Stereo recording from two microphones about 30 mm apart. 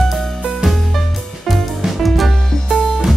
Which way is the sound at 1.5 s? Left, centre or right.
Centre.